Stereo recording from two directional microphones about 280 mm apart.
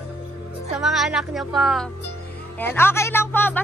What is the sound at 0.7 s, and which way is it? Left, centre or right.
A woman's voice, centre.